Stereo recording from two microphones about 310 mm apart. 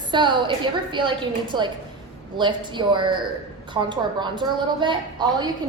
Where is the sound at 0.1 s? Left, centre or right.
Centre.